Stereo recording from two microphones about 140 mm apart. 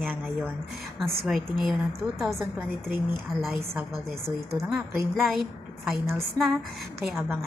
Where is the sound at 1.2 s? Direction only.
Centre (ahead or behind).